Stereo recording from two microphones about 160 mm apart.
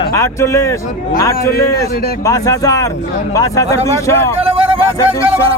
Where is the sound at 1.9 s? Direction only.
75° left (ahead or behind).